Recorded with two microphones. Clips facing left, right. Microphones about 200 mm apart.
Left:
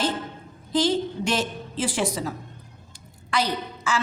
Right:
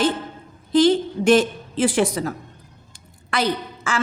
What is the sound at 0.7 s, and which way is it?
A woman's voice, 60° right (ahead or behind).